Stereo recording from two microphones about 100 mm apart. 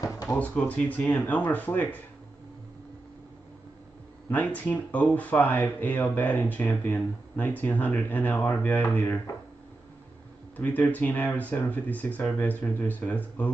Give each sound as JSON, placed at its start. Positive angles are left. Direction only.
{"t": 0.7, "sound": "speech", "side_deg": 15}
{"t": 4.3, "sound": "speech", "side_deg": 15}
{"t": 10.5, "sound": "speech", "side_deg": 15}